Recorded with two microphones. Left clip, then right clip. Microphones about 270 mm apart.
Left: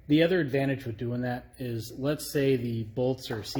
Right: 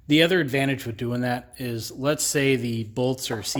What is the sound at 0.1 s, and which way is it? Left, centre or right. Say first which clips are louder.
Speech: right 4 dB; right.